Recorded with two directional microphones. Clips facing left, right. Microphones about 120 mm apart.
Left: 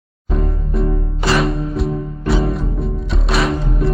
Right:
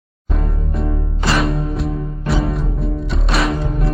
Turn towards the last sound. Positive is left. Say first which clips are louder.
# left 1 dB
turn(degrees=0)  # may be behind; listen again after turning